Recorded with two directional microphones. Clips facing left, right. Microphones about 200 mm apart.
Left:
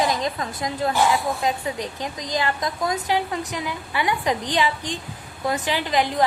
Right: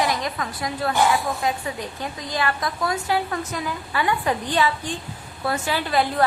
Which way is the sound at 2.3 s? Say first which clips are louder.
Even; 20° left (ahead or behind).